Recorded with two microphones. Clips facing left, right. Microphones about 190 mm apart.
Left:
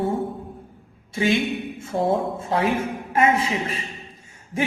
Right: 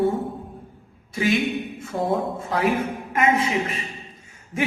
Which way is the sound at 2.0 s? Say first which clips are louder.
Left 2 dB; 25° left (ahead or behind).